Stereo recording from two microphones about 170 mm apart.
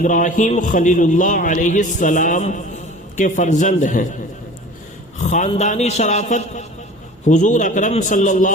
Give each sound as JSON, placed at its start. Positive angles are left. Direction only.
{"t": 0.0, "sound": "a man's voice", "side_deg": 50}
{"t": 5.1, "sound": "a man's voice", "side_deg": 45}